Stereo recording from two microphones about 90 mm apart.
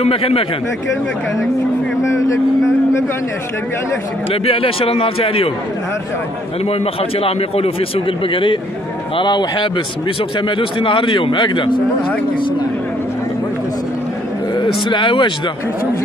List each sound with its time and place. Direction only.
0.1 s a man's voice: 90° left
2.0 s speech: 35° left (ahead or behind)
4.3 s a man's voice: 90° left
6.7 s a man's voice: 90° left; by 8.5 s 70° left (ahead or behind)
9.1 s a man's voice: 55° left (ahead or behind)
14.5 s speech: 60° left (ahead or behind)